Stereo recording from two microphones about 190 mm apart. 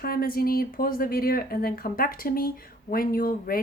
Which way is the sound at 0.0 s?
50° left (ahead or behind).